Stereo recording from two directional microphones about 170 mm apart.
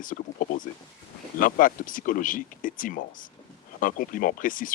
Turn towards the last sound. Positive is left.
turn(degrees=50)  # may be behind; listen again after turning